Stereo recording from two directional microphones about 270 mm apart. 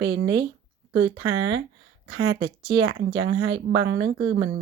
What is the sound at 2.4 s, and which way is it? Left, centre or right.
Speech, centre.